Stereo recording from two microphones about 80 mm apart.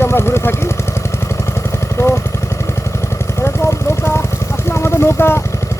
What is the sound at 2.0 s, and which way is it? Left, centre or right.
Vehicle, left.